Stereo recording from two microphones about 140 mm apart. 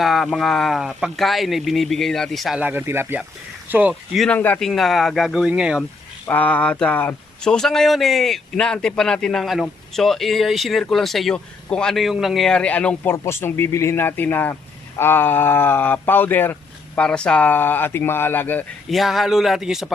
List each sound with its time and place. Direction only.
0.0 s speech: centre (ahead or behind)
2.6 s speech: 15° right (ahead or behind)
4.3 s speech: 10° left (ahead or behind); by 5.8 s 5° right (ahead or behind)
6.2 s speech: 10° left (ahead or behind)
18.9 s speech: centre (ahead or behind)